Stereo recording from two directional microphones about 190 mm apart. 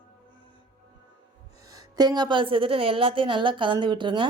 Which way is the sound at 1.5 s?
20° right (ahead or behind).